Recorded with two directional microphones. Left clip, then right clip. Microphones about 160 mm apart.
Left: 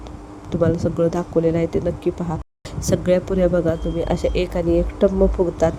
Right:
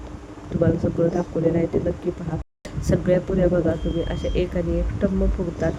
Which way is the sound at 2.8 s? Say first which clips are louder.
Left 2 dB; 30° left (ahead or behind).